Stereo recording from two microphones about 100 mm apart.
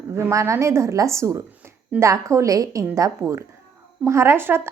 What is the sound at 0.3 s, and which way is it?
A woman's voice, 30° right (ahead or behind).